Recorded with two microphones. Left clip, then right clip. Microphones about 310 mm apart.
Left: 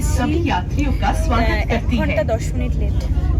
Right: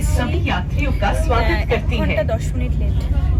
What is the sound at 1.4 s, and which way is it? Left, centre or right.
Speech, centre.